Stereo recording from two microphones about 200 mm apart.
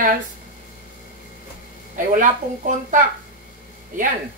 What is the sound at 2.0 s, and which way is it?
A woman's voice, 40° right (ahead or behind).